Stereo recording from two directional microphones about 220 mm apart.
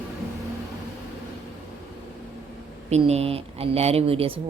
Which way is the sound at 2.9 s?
30° right (ahead or behind).